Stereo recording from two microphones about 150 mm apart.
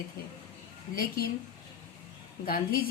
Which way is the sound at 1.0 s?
90° left.